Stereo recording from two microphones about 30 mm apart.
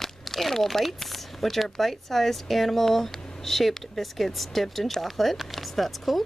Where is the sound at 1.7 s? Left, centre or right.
Centre.